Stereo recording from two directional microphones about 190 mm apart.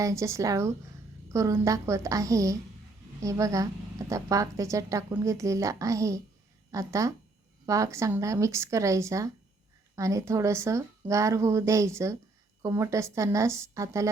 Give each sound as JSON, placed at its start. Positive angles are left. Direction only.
{"t": 0.0, "sound": "a woman's voice", "side_deg": -15}